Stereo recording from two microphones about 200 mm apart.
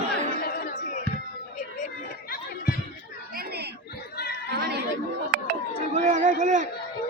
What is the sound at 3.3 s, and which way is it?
Chatter, 55° right (ahead or behind).